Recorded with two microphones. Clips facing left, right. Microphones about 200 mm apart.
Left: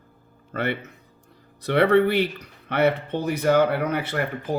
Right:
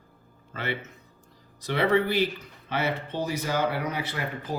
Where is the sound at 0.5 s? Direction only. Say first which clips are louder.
Left 6 dB; 60° left (ahead or behind).